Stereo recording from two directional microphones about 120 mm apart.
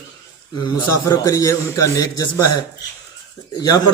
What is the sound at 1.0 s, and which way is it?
A man's voice, 30° left (ahead or behind).